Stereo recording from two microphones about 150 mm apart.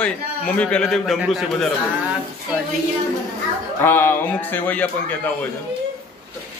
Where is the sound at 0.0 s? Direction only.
10° left (ahead or behind).